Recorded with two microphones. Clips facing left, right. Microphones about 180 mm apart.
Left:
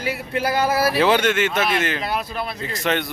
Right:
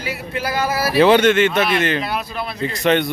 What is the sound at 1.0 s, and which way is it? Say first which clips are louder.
A man's voice: right 9 dB; 5° left (ahead or behind).